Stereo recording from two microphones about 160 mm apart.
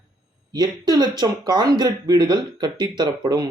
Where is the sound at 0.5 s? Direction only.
25° right (ahead or behind).